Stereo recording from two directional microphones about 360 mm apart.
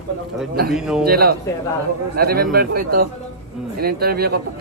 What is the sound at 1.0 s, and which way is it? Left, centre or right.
Speech, right.